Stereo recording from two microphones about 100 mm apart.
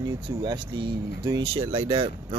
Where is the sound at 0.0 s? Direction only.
40° right (ahead or behind).